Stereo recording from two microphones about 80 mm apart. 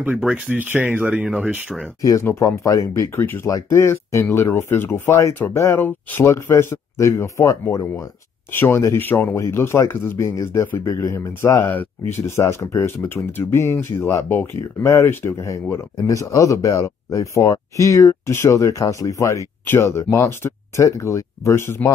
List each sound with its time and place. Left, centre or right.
0.5 s speech: right
2.0 s speech: left
8.5 s speech: left
11.6 s speech: left
12.4 s speech: left
19.6 s speech: left